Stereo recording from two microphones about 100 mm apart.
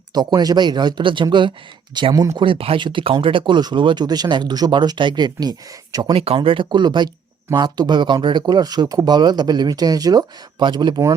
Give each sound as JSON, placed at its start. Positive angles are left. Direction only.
{"t": 0.1, "sound": "speech", "side_deg": -45}
{"t": 2.1, "sound": "speech", "side_deg": -35}
{"t": 2.4, "sound": "speech", "side_deg": -65}
{"t": 6.1, "sound": "speech", "side_deg": -70}